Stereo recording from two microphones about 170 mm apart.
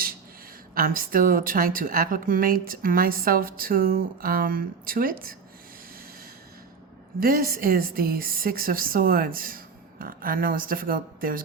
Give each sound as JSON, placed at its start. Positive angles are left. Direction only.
{"t": 0.7, "sound": "a woman's voice", "side_deg": -55}
{"t": 7.2, "sound": "a woman's voice", "side_deg": -60}